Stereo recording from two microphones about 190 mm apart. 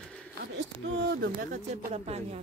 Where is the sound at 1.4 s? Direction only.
40° right (ahead or behind).